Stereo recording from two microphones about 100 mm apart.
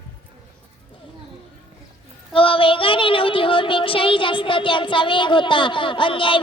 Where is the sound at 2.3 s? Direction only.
60° left (ahead or behind).